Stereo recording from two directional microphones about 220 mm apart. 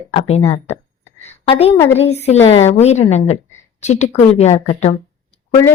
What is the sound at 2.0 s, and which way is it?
A woman's voice, 30° left (ahead or behind).